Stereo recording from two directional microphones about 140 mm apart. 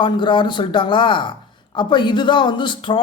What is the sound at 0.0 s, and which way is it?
Speech, 35° left (ahead or behind).